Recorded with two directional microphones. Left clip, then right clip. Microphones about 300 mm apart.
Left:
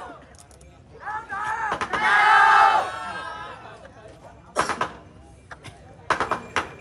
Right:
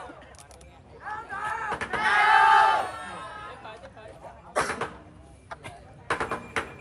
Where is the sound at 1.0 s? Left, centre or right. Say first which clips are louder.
Left 4 dB; left.